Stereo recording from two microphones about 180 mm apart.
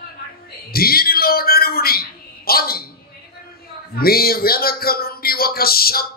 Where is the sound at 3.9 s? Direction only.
55° left (ahead or behind).